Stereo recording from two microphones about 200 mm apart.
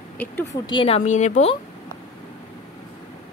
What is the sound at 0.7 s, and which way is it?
Speech, 25° left (ahead or behind).